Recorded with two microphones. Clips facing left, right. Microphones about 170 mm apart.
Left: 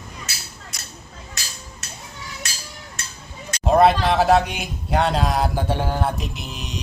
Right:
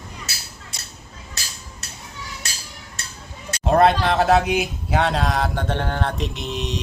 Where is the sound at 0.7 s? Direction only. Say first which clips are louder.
Even; 25° right (ahead or behind).